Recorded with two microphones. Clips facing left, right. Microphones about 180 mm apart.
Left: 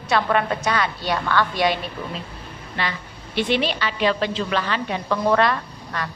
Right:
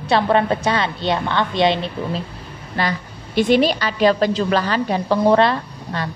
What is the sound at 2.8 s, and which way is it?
A woman's voice, 40° right (ahead or behind).